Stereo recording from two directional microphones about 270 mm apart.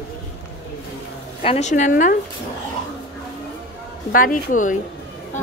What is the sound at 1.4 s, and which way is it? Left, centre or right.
Speech, left.